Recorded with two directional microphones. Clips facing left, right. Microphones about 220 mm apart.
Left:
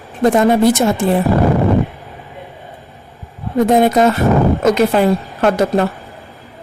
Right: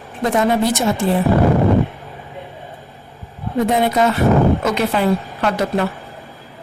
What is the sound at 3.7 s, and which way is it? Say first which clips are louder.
Speech: left 5 dB; 45° left (ahead or behind).